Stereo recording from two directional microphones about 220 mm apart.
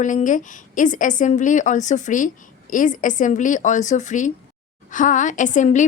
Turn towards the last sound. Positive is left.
turn(degrees=35)  # may be behind; listen again after turning